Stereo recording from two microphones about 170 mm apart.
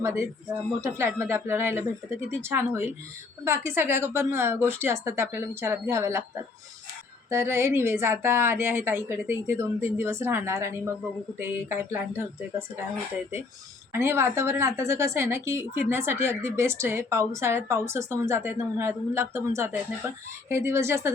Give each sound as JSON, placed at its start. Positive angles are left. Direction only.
{"t": 0.0, "sound": "a woman's voice", "side_deg": -15}
{"t": 7.3, "sound": "a woman's voice", "side_deg": -15}
{"t": 13.9, "sound": "a woman's voice", "side_deg": -15}